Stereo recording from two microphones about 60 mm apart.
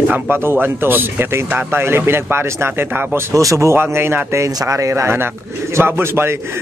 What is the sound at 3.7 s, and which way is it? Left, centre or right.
Speech, right.